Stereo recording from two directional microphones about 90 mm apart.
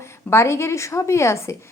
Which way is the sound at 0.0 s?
30° left (ahead or behind).